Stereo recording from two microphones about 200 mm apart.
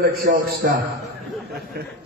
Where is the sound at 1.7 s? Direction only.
50° right (ahead or behind).